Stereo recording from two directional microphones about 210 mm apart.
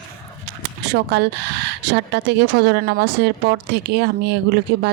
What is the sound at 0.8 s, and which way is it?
Speech, 55° right (ahead or behind).